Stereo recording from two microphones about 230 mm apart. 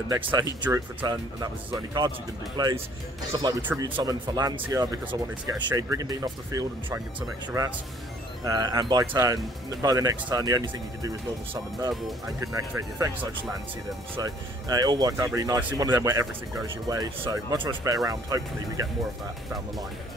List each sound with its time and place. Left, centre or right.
0.1 s speech: centre
14.1 s speech: centre